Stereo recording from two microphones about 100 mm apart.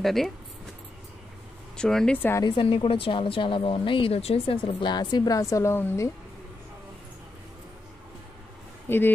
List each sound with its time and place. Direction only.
0.0 s speech: centre (ahead or behind)
1.8 s speech: 5° left (ahead or behind)
2.4 s speech: 60° left (ahead or behind); by 6.1 s 25° left (ahead or behind)
8.8 s speech: 20° left (ahead or behind)